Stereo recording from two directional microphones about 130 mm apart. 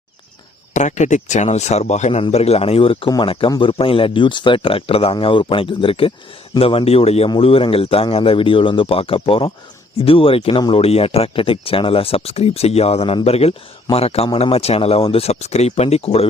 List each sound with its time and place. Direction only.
0.7 s speech: 65° left (ahead or behind); by 16.2 s 50° left (ahead or behind)